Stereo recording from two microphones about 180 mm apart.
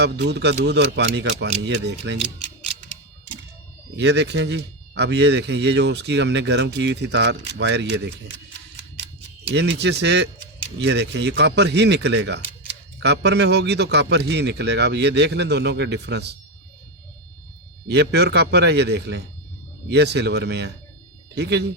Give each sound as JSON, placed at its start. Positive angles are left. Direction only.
{"t": 0.0, "sound": "speech", "side_deg": -70}
{"t": 3.9, "sound": "speech", "side_deg": -75}
{"t": 9.5, "sound": "speech", "side_deg": -70}
{"t": 17.8, "sound": "speech", "side_deg": -65}